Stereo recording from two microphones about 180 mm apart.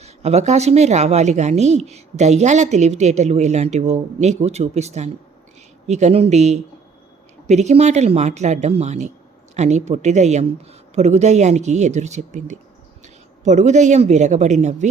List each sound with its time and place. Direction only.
0.0 s speech: 35° right (ahead or behind)